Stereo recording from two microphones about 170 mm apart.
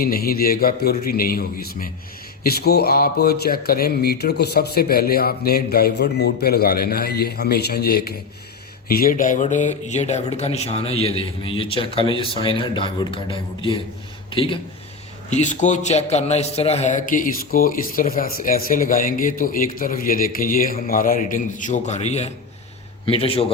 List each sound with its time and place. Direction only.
0.0 s a man's voice: 60° left (ahead or behind)
8.9 s speech: 60° left (ahead or behind); by 14.6 s 30° left (ahead or behind)
15.3 s a man's voice: 45° left (ahead or behind)